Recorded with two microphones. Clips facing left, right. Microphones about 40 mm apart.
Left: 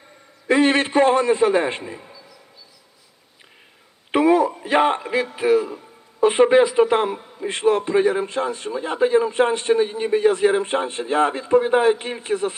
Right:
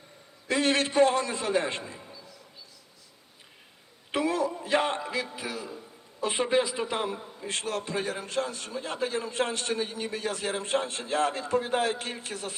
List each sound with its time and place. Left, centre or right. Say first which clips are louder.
0.4 s a man's voice: left 9 dB; left
4.1 s a man's voice: left 11 dB; left
7.4 s a man's voice: left 13 dB; left